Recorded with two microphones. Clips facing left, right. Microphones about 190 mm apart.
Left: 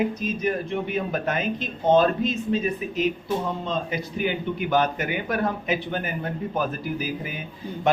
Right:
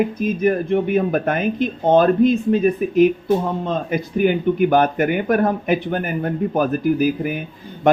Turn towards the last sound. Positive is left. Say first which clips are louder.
# right 11 dB
turn(degrees=-50)  # may be behind; listen again after turning